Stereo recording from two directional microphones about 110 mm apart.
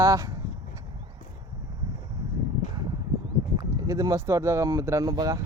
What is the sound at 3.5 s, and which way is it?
Speech, 35° right (ahead or behind).